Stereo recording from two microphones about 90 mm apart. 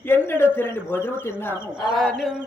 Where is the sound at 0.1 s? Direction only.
25° left (ahead or behind).